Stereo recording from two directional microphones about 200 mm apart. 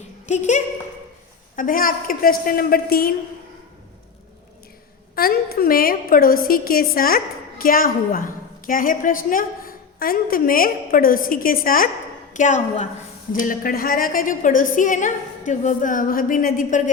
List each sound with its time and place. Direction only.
0.3 s a woman's voice: 35° left (ahead or behind)
5.1 s a woman's voice: 50° left (ahead or behind)